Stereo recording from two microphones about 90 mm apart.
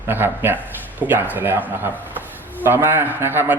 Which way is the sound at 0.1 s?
20° right (ahead or behind).